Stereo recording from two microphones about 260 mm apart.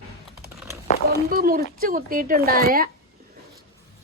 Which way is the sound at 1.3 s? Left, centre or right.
Right.